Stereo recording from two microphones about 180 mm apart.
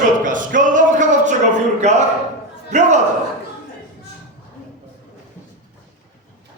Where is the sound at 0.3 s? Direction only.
45° right (ahead or behind).